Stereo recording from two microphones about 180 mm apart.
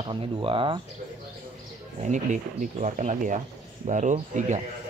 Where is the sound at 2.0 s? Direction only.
45° right (ahead or behind).